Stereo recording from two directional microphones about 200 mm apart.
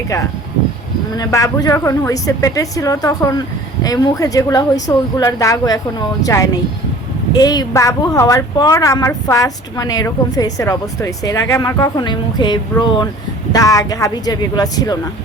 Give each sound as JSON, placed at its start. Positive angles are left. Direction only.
{"t": 1.1, "sound": "a woman's voice", "side_deg": 15}